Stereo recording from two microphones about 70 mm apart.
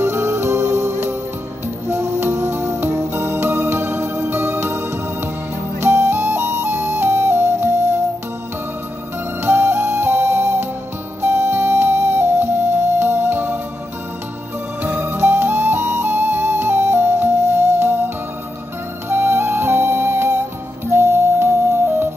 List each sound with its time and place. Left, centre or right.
0.0 s music: right
9.4 s music: right
14.8 s flute: right
19.0 s flute: right
20.9 s music: right